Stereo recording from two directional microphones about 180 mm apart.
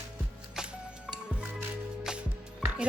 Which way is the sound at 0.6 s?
5° right (ahead or behind).